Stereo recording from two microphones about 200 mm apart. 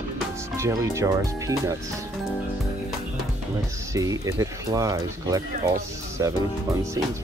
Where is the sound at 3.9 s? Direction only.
15° right (ahead or behind).